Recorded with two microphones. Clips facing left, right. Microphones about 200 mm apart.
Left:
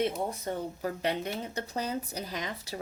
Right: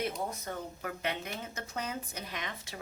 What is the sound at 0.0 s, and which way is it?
Speech, 30° left (ahead or behind).